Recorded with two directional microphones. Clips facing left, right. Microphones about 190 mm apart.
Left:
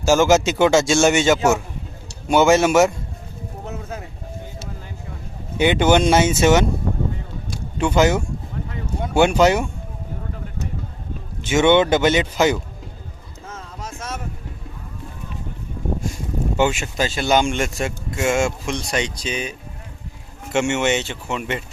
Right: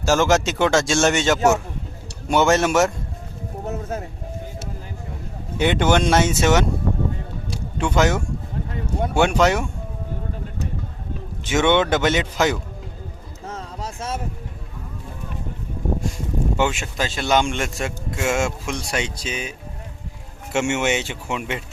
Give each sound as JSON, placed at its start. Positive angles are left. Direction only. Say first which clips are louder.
{"t": 0.0, "sound": "speech", "louder": "left 3 dB", "side_deg": 0}
{"t": 3.7, "sound": "music", "louder": "right 4 dB", "side_deg": -45}
{"t": 5.5, "sound": "speech", "louder": "left 3 dB", "side_deg": 0}
{"t": 7.8, "sound": "speech", "louder": "left 3 dB", "side_deg": 0}
{"t": 11.4, "sound": "speech", "louder": "left 3 dB", "side_deg": 0}
{"t": 13.4, "sound": "boat", "louder": "right 3 dB", "side_deg": -35}
{"t": 16.6, "sound": "speech", "louder": "left 5 dB", "side_deg": 0}